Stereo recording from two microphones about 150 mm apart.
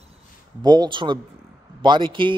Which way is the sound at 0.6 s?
25° right (ahead or behind).